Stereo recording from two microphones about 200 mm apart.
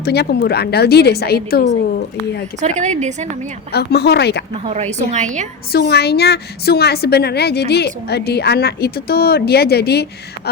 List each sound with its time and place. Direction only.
0.0 s a woman's voice: 55° left (ahead or behind)
2.6 s a woman's voice: 35° right (ahead or behind)
3.7 s a woman's voice: 55° left (ahead or behind)
4.6 s a woman's voice: 35° right (ahead or behind)
5.7 s a woman's voice: 55° left (ahead or behind)